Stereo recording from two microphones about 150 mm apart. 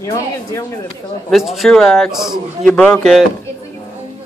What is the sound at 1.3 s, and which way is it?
A man's voice, centre (ahead or behind).